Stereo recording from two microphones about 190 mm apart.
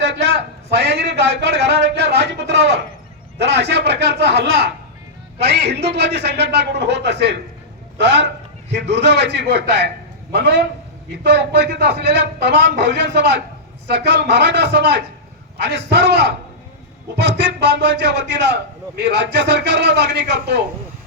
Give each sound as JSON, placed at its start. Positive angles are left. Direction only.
{"t": 0.0, "sound": "a man's voice", "side_deg": -65}